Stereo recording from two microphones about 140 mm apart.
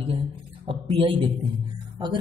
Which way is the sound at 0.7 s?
40° right (ahead or behind).